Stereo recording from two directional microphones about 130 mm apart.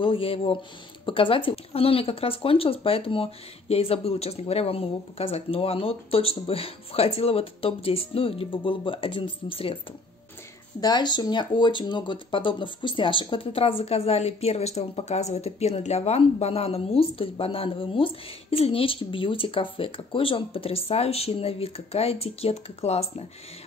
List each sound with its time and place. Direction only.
0.0 s speech: 45° left (ahead or behind)
10.8 s speech: 35° left (ahead or behind); by 23.2 s 55° left (ahead or behind)